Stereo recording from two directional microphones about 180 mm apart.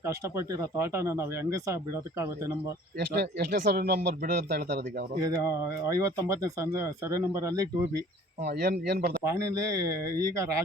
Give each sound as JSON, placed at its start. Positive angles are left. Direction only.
{"t": 0.0, "sound": "speech", "side_deg": -15}
{"t": 3.0, "sound": "speech", "side_deg": -65}
{"t": 5.2, "sound": "speech", "side_deg": -15}
{"t": 8.4, "sound": "speech", "side_deg": -60}
{"t": 9.2, "sound": "speech", "side_deg": -15}